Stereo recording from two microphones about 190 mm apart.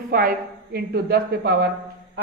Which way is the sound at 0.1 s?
50° right (ahead or behind).